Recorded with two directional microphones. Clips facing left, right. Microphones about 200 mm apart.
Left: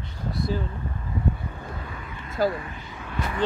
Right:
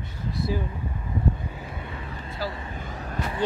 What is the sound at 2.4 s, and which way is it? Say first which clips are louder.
Speech: left 9 dB; 50° left (ahead or behind).